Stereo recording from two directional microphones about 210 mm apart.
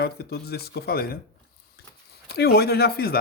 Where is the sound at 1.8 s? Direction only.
50° left (ahead or behind).